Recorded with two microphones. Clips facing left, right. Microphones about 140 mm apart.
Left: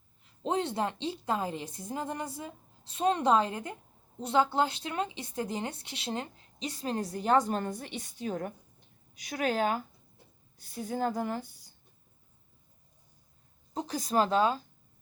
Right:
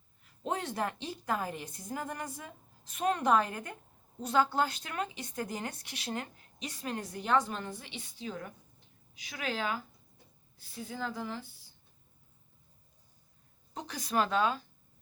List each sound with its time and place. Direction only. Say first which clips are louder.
0.2 s speech: left 5 dB; 25° left (ahead or behind); by 11.4 s 45° left (ahead or behind)
13.7 s speech: left 4 dB; 40° left (ahead or behind)